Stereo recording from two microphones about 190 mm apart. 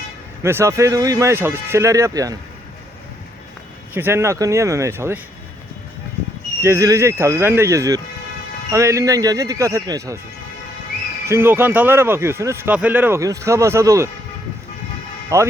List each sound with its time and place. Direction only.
0.4 s speech: 15° right (ahead or behind)
3.9 s speech: 10° right (ahead or behind)
6.6 s speech: 15° right (ahead or behind)
11.3 s speech: 10° right (ahead or behind)
15.3 s speech: 15° right (ahead or behind)